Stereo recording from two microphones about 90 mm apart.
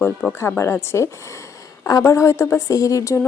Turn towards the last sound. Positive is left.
turn(degrees=35)  # may be behind; listen again after turning